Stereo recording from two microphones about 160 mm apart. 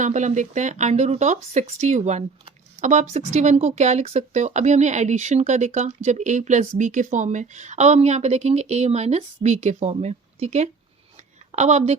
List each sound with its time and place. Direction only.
0.0 s speech: 50° right (ahead or behind)